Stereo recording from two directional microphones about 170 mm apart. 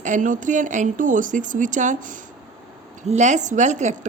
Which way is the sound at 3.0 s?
45° right (ahead or behind).